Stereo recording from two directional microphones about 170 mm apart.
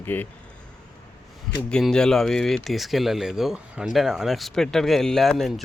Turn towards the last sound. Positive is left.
turn(degrees=0)  # may be behind; listen again after turning